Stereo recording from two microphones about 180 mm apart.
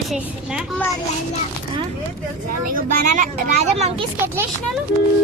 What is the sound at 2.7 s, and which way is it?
Speech, 40° right (ahead or behind).